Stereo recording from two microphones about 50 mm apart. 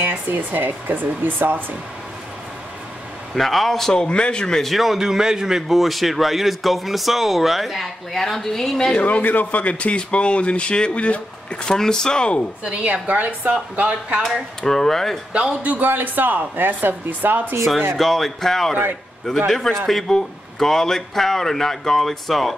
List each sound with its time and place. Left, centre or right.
0.0 s speech: right
3.3 s speech: centre
4.6 s a man's voice: centre
5.7 s speech: centre
8.9 s speech: left
12.6 s a woman's voice: right
14.6 s speech: centre
15.6 s speech: right
17.9 s speech: centre